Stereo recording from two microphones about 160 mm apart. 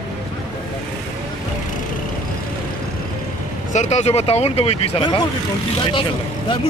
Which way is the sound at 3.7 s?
45° left (ahead or behind).